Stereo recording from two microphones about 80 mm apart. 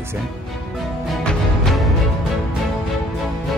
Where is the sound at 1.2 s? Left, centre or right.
Centre.